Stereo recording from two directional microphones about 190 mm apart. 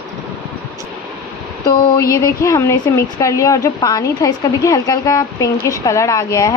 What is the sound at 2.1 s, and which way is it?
Speech, 15° left (ahead or behind).